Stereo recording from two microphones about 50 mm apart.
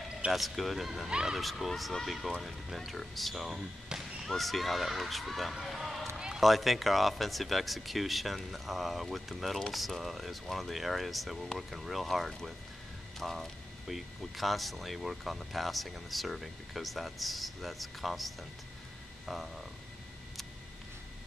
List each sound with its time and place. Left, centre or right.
0.3 s speech: centre
1.4 s speech: centre
3.9 s basketball bounce: centre
4.3 s speech: centre
6.1 s run: centre
6.4 s speech: centre
19.2 s a sound: centre